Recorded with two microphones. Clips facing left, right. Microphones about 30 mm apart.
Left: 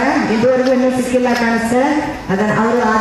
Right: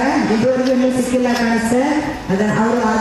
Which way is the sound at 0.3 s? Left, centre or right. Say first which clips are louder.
Left 2 dB; centre.